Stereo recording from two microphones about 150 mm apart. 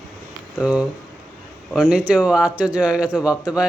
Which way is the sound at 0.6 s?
5° right (ahead or behind).